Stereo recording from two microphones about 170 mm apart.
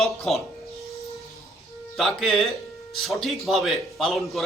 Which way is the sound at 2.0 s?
Centre (ahead or behind).